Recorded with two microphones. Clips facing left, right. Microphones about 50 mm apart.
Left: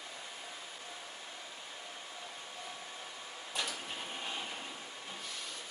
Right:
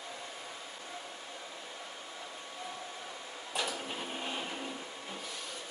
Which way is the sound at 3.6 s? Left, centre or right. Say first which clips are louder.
Right 3 dB; centre.